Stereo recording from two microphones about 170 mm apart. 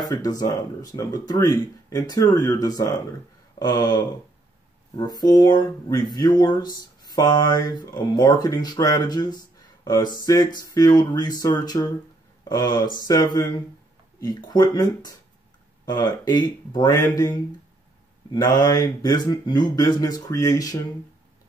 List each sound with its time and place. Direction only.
0.1 s speech: 20° left (ahead or behind)
3.5 s a sound: 25° left (ahead or behind)
4.9 s speech: 25° left (ahead or behind)